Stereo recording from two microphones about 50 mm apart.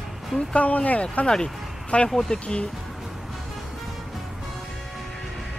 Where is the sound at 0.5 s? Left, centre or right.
Left; by 2.4 s centre.